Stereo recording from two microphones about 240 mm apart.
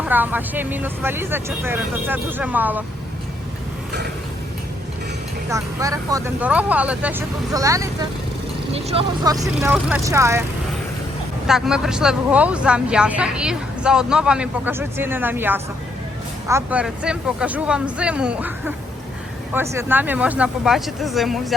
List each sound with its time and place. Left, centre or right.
0.0 s speech: centre
5.5 s speech: centre
8.7 s speech: right
9.6 s speech: centre
11.4 s speech: centre
19.7 s speech: centre